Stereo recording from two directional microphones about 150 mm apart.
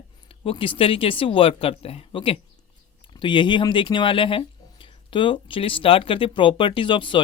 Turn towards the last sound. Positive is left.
turn(degrees=35)  # may be behind; listen again after turning